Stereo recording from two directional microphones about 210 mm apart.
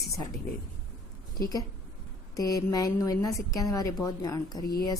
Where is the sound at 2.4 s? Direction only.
15° left (ahead or behind).